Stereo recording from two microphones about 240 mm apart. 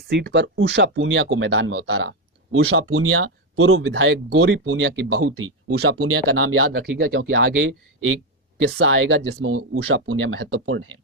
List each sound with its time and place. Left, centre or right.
0.1 s speech: right
6.7 s speech: right